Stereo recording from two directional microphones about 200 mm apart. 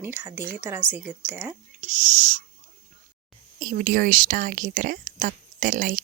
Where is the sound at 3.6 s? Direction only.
45° right (ahead or behind).